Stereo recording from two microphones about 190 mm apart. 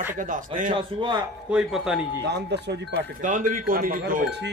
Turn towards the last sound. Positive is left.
turn(degrees=-45)  # may be behind; listen again after turning